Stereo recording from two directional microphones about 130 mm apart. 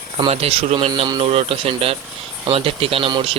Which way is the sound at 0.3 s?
50° right (ahead or behind).